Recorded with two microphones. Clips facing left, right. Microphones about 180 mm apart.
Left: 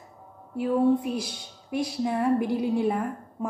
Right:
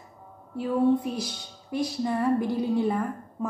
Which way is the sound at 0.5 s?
5° left (ahead or behind).